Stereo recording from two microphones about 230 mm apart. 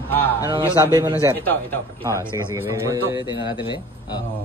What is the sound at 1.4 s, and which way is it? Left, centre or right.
Speech, centre.